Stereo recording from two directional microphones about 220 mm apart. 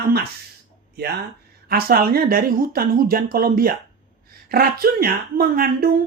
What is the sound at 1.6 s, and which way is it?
A woman's voice, 45° right (ahead or behind).